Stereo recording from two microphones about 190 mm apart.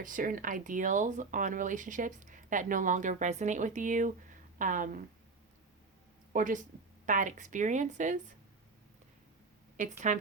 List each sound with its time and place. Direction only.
0.0 s speech: 45° right (ahead or behind)
6.3 s speech: 45° right (ahead or behind)
10.1 s speech: 40° right (ahead or behind)